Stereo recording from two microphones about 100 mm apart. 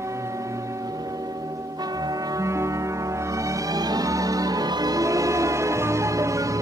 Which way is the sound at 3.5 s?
40° right (ahead or behind).